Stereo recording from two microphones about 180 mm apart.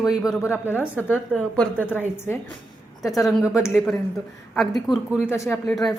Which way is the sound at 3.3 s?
Centre (ahead or behind).